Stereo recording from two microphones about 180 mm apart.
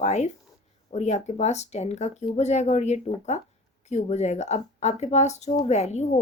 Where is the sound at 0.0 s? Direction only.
40° left (ahead or behind).